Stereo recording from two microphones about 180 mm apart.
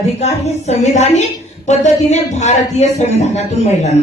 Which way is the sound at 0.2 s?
35° left (ahead or behind).